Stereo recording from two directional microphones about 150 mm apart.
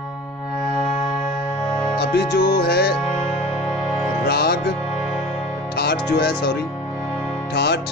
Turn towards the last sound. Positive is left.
turn(degrees=90)